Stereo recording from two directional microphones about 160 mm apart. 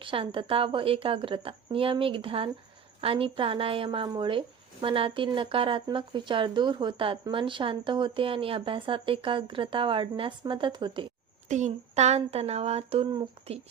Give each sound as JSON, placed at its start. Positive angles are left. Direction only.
{"t": 0.0, "sound": "a woman's voice", "side_deg": -35}
{"t": 11.4, "sound": "a woman's voice", "side_deg": -50}